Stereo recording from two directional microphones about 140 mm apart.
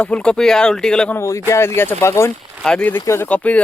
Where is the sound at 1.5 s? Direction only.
20° left (ahead or behind).